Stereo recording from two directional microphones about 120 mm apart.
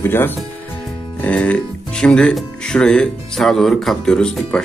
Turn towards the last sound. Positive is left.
turn(degrees=5)  # may be behind; listen again after turning